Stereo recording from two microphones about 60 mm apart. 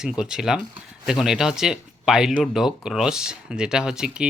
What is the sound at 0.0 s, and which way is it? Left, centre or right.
Speech, centre.